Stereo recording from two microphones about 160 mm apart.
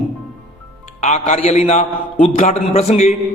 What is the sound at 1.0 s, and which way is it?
A man's voice, 45° left (ahead or behind).